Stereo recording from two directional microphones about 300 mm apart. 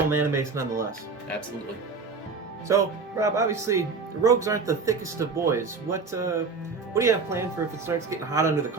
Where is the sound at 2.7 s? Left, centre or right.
Centre.